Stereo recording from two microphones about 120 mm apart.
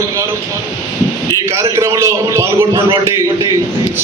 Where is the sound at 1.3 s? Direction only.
25° right (ahead or behind).